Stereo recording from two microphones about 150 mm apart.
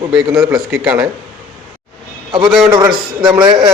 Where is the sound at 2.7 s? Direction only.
25° right (ahead or behind).